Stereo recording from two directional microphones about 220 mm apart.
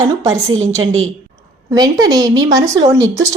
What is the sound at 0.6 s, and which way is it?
Speech, 30° right (ahead or behind).